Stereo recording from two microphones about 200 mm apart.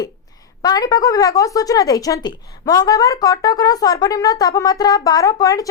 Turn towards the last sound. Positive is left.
turn(degrees=15)  # may be behind; listen again after turning